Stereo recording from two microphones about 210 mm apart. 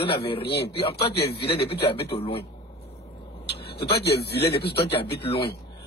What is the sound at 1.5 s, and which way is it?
Speech, 25° left (ahead or behind).